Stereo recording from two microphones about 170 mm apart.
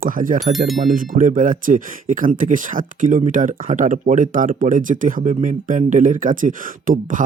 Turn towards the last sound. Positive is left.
turn(degrees=-50)  # may be behind; listen again after turning